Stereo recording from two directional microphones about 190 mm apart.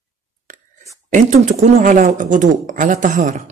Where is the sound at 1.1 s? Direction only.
40° right (ahead or behind).